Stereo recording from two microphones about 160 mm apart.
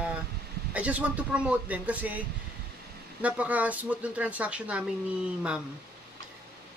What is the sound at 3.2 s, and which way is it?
Speech, 10° right (ahead or behind).